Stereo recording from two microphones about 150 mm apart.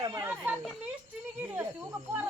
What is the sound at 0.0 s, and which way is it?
Speech, 20° right (ahead or behind).